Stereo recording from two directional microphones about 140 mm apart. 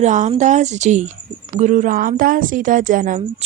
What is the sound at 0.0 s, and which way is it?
A woman's voice, 60° right (ahead or behind).